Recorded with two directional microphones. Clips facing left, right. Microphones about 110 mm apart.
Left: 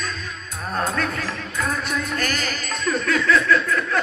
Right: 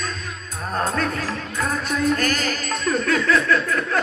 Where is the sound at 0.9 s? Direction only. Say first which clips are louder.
Right 1 dB; 35° right (ahead or behind).